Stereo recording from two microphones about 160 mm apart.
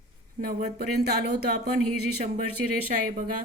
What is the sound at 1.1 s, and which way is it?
Speech, 80° right.